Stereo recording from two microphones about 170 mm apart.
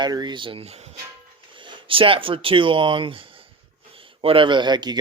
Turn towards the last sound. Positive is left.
turn(degrees=-25)  # may be behind; listen again after turning